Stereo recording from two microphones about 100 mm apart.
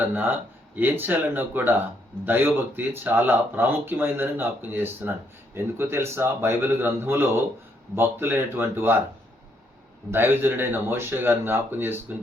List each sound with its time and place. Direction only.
0.0 s speech: 20° right (ahead or behind)
10.1 s speech: 20° right (ahead or behind)